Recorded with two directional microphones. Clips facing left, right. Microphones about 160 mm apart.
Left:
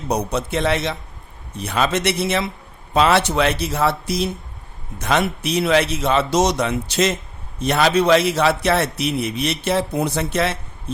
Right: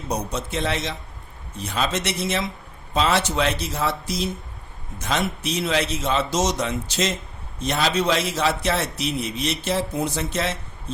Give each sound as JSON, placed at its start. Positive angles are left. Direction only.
{"t": 0.1, "sound": "a man's voice", "side_deg": 65}